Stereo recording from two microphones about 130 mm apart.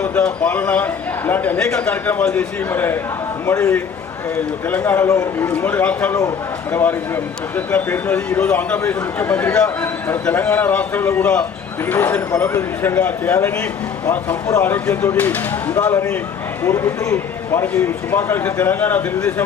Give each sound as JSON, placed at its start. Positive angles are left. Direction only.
{"t": 0.0, "sound": "a man's voice", "side_deg": 10}
{"t": 4.8, "sound": "a man's voice", "side_deg": 25}